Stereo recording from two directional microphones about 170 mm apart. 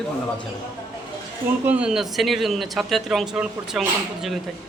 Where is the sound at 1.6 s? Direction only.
5° right (ahead or behind).